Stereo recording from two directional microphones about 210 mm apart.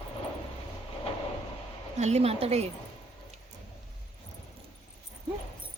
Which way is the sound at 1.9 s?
30° right (ahead or behind).